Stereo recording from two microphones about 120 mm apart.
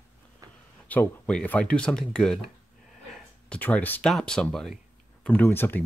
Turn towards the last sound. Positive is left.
turn(degrees=15)  # may be behind; listen again after turning